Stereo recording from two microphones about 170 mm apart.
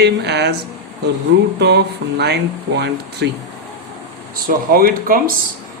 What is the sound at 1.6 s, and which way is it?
Speech, 80° right.